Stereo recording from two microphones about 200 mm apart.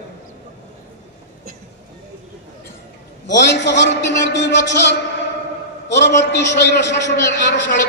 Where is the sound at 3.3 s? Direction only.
60° left (ahead or behind).